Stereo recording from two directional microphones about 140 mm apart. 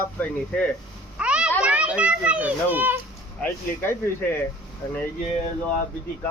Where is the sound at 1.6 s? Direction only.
10° right (ahead or behind).